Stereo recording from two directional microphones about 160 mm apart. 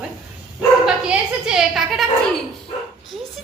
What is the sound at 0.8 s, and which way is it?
A woman's voice, 5° right (ahead or behind).